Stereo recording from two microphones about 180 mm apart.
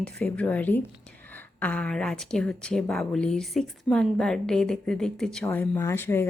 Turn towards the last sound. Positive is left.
turn(degrees=10)  # may be behind; listen again after turning